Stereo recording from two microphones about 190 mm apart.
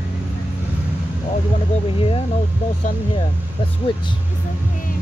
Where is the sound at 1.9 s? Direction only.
30° left (ahead or behind).